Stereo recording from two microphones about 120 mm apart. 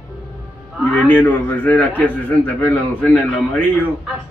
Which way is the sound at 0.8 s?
10° left (ahead or behind).